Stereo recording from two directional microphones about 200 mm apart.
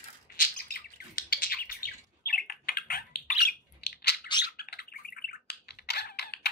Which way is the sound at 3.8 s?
55° left (ahead or behind).